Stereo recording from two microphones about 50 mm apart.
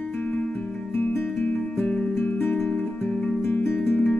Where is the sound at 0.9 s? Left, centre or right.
Left.